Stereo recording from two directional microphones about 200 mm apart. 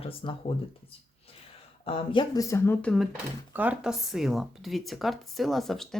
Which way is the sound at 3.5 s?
10° right (ahead or behind).